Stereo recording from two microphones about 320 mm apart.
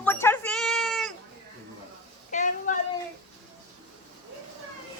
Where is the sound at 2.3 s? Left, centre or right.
Left.